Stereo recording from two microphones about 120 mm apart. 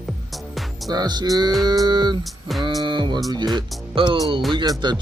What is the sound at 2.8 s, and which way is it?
Music, 40° right (ahead or behind).